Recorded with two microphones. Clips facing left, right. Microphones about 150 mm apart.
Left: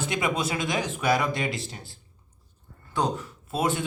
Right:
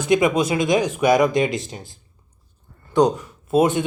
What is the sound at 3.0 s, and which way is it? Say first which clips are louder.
Speech: right 10 dB; 15° right (ahead or behind).